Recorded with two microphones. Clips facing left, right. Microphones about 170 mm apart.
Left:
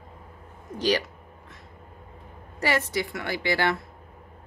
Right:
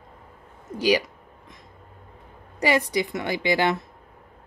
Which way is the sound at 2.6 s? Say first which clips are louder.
Right 4 dB; 15° right (ahead or behind).